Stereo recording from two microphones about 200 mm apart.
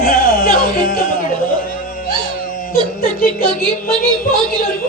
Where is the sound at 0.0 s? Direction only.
45° left (ahead or behind).